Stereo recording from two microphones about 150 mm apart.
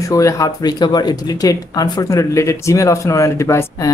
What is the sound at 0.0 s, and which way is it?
Speech, 20° left (ahead or behind).